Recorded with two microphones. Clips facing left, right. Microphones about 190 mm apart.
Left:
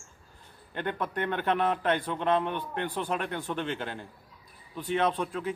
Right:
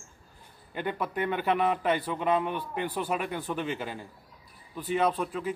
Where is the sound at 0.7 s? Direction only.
5° right (ahead or behind).